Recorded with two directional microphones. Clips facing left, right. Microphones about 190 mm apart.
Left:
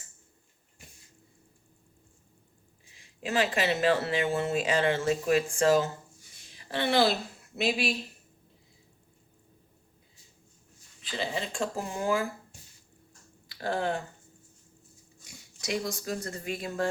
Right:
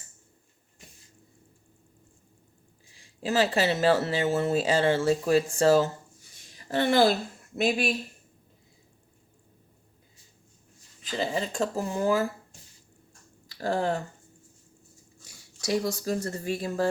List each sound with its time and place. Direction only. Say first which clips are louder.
3.2 s speech: right 3 dB; 35° right (ahead or behind)
6.5 s a sound: right 3 dB; 45° right (ahead or behind)
7.5 s speech: right 3 dB; 50° right (ahead or behind)
11.0 s speech: right 4 dB; 40° right (ahead or behind)
13.5 s speech: right 3 dB; 40° right (ahead or behind)
15.7 s speech: right 5 dB; 40° right (ahead or behind)